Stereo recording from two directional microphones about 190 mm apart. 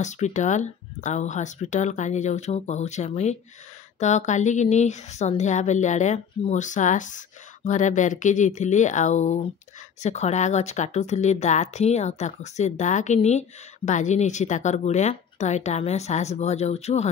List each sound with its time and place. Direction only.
0.0 s speech: 40° left (ahead or behind)